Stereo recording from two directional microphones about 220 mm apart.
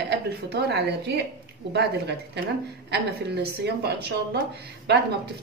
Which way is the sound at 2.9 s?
50° right (ahead or behind).